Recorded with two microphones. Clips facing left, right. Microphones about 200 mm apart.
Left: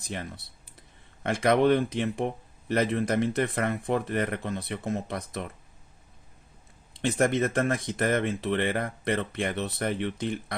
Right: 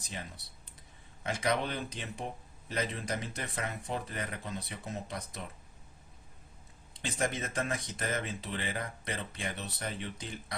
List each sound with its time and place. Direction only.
1.2 s speech: 60° left (ahead or behind)
7.0 s speech: 60° left (ahead or behind)